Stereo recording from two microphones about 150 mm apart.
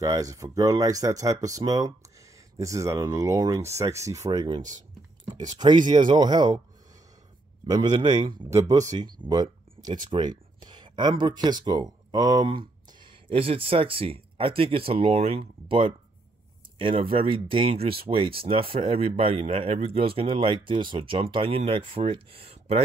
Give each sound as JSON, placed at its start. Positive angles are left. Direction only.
{"t": 0.0, "sound": "speech", "side_deg": -20}
{"t": 7.7, "sound": "speech", "side_deg": -30}
{"t": 9.3, "sound": "a sound", "side_deg": -25}
{"t": 10.1, "sound": "speech", "side_deg": -30}